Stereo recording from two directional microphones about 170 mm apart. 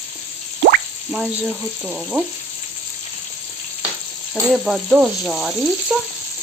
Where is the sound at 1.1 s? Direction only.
5° right (ahead or behind).